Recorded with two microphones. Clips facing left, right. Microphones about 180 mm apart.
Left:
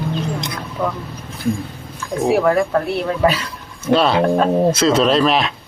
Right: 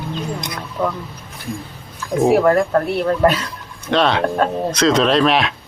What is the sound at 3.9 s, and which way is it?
Speech, 5° left (ahead or behind).